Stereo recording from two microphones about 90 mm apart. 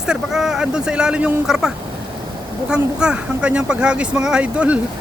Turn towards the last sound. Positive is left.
turn(degrees=-15)  # may be behind; listen again after turning